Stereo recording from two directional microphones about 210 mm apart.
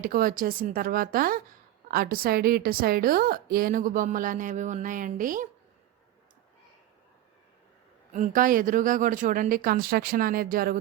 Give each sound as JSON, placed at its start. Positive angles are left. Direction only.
{"t": 0.0, "sound": "a woman's voice", "side_deg": -45}
{"t": 8.1, "sound": "a woman's voice", "side_deg": -40}